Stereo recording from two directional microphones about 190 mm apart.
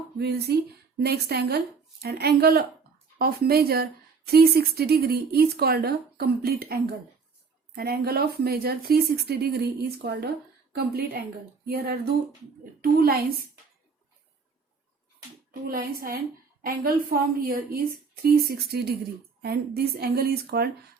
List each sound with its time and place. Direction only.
0.2 s a woman's voice: 60° right (ahead or behind)
7.8 s a woman's voice: 55° right (ahead or behind)
15.6 s a woman's voice: 50° right (ahead or behind)